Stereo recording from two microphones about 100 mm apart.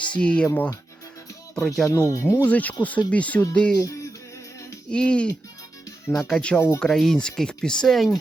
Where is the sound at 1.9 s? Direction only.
35° left (ahead or behind).